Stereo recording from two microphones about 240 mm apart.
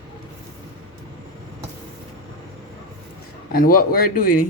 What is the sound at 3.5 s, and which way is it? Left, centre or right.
Speech, left.